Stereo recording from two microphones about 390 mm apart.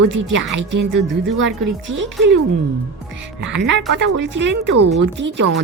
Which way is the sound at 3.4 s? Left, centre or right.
Right.